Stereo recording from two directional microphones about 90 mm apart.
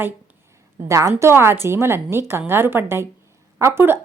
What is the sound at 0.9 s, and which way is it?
A woman's voice, 35° right (ahead or behind).